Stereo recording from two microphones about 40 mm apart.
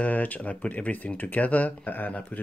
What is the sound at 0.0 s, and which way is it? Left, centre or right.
Speech, left.